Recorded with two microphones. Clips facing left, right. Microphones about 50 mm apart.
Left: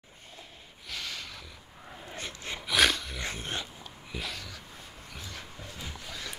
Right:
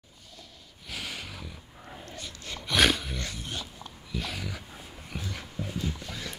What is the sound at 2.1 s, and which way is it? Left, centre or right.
Dog, left.